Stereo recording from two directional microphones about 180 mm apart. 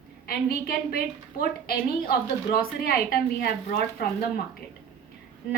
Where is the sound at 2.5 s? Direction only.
55° left (ahead or behind).